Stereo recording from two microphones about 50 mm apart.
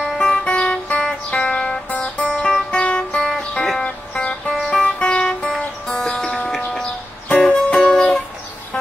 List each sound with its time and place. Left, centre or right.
0.0 s music: centre
4.5 s music: centre
4.8 s music: centre
6.5 s a sound: centre
7.4 s music: centre